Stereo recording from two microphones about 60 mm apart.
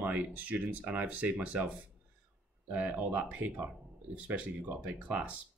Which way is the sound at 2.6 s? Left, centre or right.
Right.